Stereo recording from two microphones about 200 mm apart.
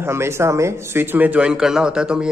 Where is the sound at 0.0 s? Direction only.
10° right (ahead or behind).